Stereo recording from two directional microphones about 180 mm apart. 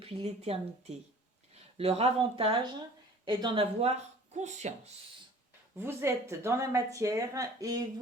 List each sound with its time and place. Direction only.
0.0 s a woman's voice: 35° right (ahead or behind)
5.7 s speech: 15° right (ahead or behind)